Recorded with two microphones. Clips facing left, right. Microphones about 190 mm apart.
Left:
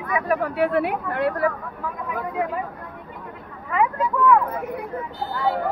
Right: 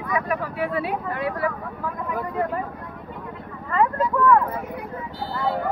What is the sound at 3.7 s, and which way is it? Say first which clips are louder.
Speech: right 1 dB; 10° left (ahead or behind).